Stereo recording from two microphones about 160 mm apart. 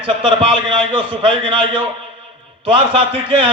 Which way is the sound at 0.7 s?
30° right (ahead or behind).